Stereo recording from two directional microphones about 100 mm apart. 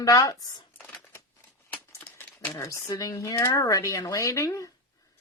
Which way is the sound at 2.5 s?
30° left (ahead or behind).